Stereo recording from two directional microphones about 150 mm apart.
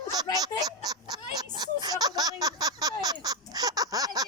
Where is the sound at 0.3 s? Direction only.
25° right (ahead or behind).